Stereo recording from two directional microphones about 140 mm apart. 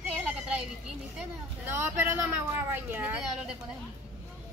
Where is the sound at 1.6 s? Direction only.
15° right (ahead or behind).